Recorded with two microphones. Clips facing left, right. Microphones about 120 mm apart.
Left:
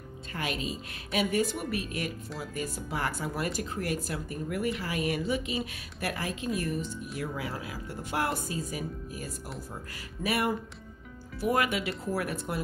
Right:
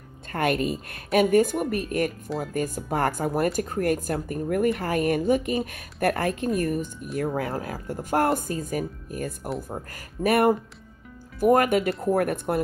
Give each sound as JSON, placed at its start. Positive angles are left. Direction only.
{"t": 0.3, "sound": "speech", "side_deg": -55}